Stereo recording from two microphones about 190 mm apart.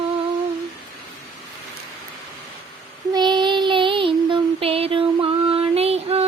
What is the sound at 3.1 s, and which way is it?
Child singing, 25° right (ahead or behind).